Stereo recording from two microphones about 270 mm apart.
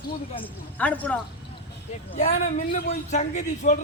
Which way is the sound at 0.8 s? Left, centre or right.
Centre.